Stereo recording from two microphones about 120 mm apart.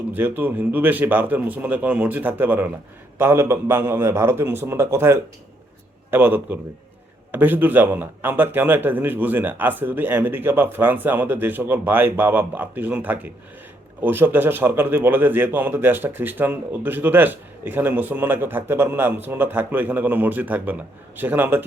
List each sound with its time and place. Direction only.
0.1 s a man's voice: 15° right (ahead or behind)